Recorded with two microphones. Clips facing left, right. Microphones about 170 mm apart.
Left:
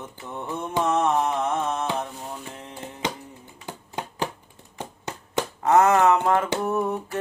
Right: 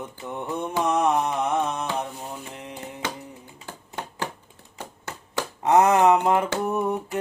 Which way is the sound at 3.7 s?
15° left (ahead or behind).